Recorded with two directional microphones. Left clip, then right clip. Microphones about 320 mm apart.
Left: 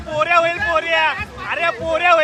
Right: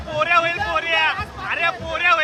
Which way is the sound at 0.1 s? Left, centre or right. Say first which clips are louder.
Left 2 dB; centre.